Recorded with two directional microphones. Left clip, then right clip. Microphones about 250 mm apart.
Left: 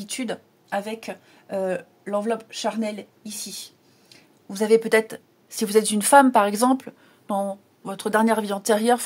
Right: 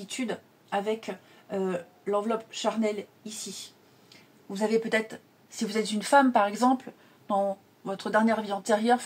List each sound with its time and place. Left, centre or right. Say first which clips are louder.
0.1 s speech: left 3 dB; left
4.5 s speech: left 8 dB; left